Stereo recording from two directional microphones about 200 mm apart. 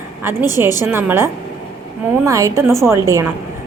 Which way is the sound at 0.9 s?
10° right (ahead or behind).